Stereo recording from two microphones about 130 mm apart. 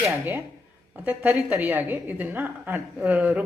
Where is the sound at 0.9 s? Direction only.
15° right (ahead or behind).